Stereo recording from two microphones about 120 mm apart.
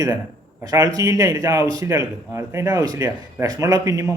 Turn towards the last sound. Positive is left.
turn(degrees=-25)  # may be behind; listen again after turning